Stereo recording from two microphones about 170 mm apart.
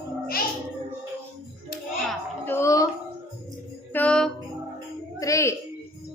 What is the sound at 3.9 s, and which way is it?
Speech, 5° left (ahead or behind).